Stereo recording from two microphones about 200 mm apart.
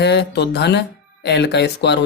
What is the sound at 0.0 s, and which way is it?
Speech, 55° left (ahead or behind).